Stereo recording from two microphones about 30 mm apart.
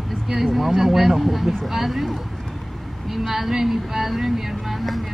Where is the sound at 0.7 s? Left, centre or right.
Centre.